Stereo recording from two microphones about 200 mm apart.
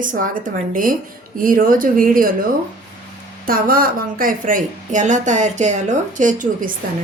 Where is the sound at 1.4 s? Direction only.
45° right (ahead or behind).